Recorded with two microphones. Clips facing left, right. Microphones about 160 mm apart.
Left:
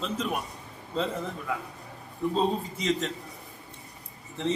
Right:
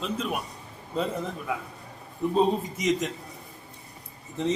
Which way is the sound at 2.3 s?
15° right (ahead or behind).